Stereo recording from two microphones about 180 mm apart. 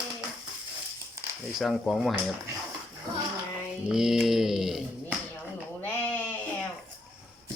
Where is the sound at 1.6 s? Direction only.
Centre (ahead or behind).